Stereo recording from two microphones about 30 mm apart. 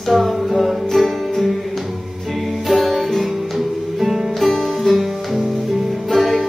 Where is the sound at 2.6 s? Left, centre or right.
Centre.